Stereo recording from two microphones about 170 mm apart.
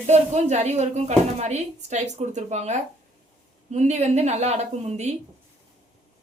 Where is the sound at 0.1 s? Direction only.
40° right (ahead or behind).